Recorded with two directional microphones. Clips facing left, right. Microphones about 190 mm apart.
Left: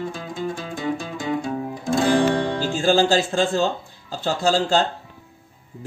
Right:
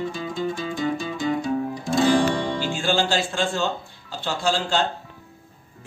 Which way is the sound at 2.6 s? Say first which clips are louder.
Left 5 dB; 40° left (ahead or behind).